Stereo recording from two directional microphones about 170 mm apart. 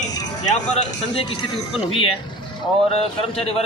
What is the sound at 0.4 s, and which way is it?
Speech, 45° left (ahead or behind).